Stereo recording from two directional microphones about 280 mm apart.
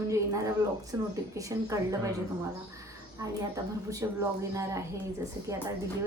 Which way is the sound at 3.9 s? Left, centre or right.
Centre.